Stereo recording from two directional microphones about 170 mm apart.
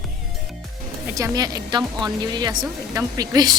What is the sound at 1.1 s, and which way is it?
Speech, 20° right (ahead or behind).